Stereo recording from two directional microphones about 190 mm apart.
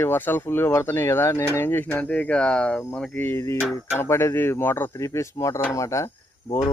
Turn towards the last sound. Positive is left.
turn(degrees=15)  # may be behind; listen again after turning